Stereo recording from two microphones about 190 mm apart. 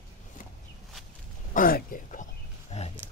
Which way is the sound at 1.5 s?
45° left (ahead or behind).